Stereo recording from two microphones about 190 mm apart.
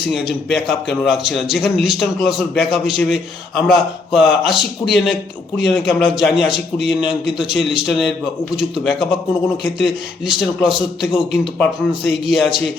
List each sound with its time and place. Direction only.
0.7 s a man's voice: centre (ahead or behind)
10.8 s a man's voice: 25° left (ahead or behind)
11.6 s a man's voice: centre (ahead or behind)